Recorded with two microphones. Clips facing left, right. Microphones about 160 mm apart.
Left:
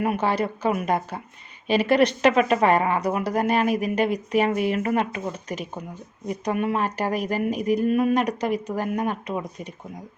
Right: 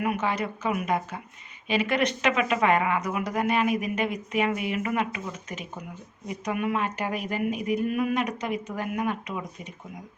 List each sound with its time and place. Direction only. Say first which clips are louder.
0.0 s speech: left 4 dB; 30° left (ahead or behind)